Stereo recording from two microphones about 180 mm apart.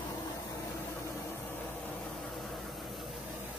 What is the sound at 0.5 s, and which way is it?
Vehicle, 15° left (ahead or behind).